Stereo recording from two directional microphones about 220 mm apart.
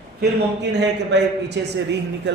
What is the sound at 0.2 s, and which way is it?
A man's voice, 50° right (ahead or behind).